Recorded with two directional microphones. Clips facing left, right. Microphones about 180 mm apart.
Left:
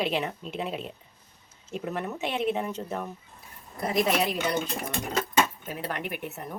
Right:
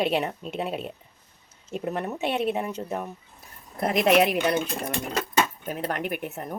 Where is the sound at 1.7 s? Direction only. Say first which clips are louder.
Right 3 dB; 35° right (ahead or behind).